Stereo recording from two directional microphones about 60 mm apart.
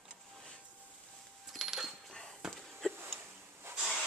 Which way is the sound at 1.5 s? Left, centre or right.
Centre.